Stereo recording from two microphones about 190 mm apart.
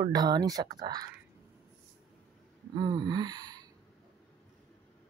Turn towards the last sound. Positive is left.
turn(degrees=-20)  # may be behind; listen again after turning